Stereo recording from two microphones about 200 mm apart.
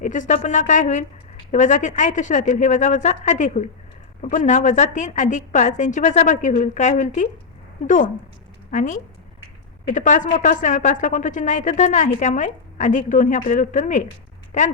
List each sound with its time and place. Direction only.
0.0 s a woman's voice: 40° left (ahead or behind)